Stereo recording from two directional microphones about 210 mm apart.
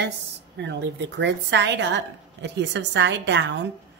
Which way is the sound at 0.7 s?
55° right (ahead or behind).